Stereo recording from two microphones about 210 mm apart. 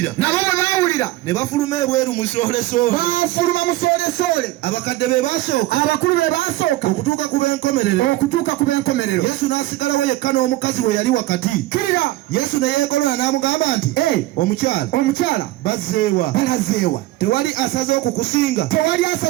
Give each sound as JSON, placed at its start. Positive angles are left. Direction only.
{"t": 0.0, "sound": "a man's voice", "side_deg": 10}
{"t": 2.4, "sound": "a man's voice", "side_deg": 40}